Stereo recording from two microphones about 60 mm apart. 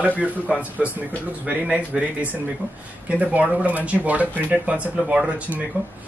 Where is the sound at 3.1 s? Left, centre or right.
Right.